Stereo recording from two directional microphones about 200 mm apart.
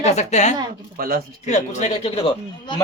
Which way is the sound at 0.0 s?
35° left (ahead or behind).